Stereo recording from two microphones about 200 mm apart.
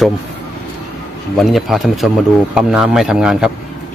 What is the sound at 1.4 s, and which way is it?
Speech, centre (ahead or behind).